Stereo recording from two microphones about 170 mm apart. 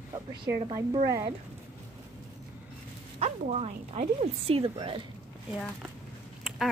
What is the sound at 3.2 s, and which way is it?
Speech, 40° right (ahead or behind).